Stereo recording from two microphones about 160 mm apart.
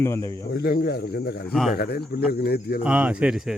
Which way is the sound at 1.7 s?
90° left.